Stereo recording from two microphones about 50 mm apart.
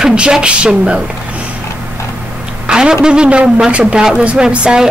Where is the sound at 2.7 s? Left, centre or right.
Centre.